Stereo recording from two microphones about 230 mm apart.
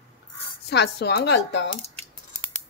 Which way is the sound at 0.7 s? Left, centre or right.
Left.